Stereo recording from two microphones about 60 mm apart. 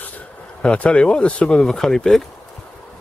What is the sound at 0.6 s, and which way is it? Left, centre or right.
Speech, centre.